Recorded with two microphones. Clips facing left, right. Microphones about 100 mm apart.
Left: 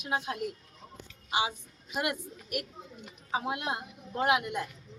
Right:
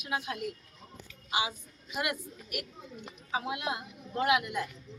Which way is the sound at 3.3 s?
40° left (ahead or behind).